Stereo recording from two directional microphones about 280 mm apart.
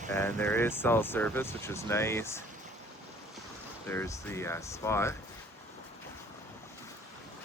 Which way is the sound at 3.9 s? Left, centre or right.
Centre.